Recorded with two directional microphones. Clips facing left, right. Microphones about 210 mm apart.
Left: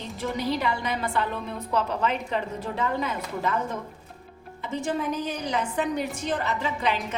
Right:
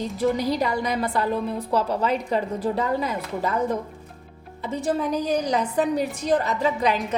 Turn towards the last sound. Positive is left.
turn(degrees=-40)  # may be behind; listen again after turning